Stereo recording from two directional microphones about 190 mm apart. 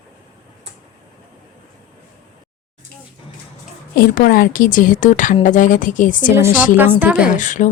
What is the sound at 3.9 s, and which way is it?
Speech, 50° left (ahead or behind).